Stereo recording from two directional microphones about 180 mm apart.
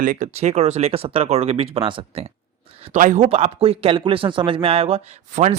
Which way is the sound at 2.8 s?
40° right (ahead or behind).